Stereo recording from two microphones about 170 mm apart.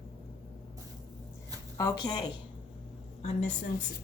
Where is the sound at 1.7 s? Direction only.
20° left (ahead or behind).